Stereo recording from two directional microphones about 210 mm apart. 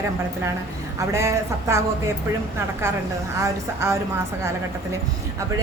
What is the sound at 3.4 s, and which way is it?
Speech, 15° right (ahead or behind).